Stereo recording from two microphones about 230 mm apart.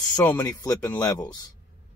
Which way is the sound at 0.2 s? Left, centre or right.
Centre.